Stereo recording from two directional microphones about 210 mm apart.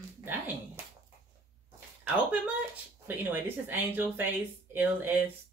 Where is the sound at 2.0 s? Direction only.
5° right (ahead or behind).